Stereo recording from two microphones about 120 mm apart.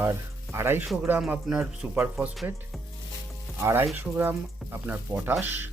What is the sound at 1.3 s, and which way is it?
Speech, 5° right (ahead or behind).